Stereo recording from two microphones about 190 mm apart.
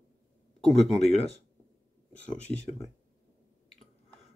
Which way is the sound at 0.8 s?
35° left (ahead or behind).